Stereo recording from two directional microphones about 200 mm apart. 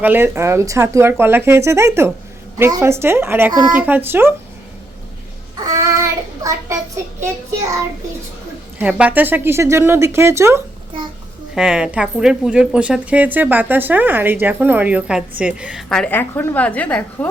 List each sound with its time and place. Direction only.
0.0 s speech: 10° right (ahead or behind)
5.6 s child singing: 15° right (ahead or behind)
8.8 s speech: 5° right (ahead or behind)